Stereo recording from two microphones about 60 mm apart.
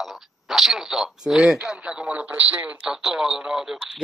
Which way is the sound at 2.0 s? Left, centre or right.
Right.